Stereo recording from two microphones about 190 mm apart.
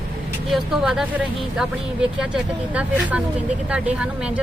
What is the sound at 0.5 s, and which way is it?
Speech, centre (ahead or behind).